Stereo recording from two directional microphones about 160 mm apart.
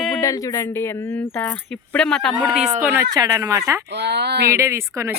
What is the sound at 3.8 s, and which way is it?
Speech, 90° right.